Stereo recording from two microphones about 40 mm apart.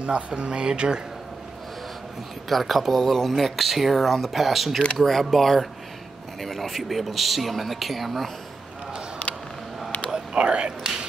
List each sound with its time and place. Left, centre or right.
0.0 s speech: right
2.5 s speech: centre
10.3 s whispering: right